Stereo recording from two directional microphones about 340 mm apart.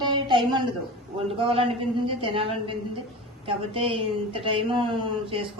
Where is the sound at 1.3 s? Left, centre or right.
Centre.